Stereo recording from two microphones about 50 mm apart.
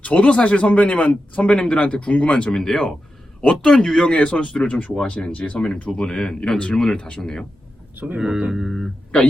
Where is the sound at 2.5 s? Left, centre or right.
Centre.